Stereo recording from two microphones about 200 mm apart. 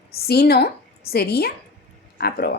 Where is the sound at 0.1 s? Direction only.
50° left (ahead or behind).